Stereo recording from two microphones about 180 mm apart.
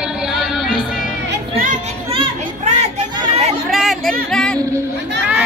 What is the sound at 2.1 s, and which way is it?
Children playing, 35° right (ahead or behind).